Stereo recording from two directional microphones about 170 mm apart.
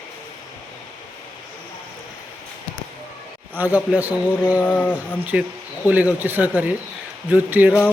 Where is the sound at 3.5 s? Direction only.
10° right (ahead or behind).